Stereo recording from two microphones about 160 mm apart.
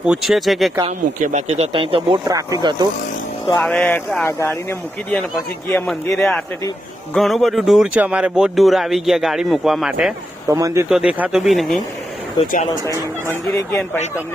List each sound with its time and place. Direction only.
0.0 s speech: 5° right (ahead or behind)
0.9 s speech: 45° right (ahead or behind); by 2.7 s 25° right (ahead or behind)
3.6 s speech: 5° left (ahead or behind)
10.5 s speech: 20° right (ahead or behind)
10.8 s speech: 5° right (ahead or behind)
13.5 s speech: 15° left (ahead or behind)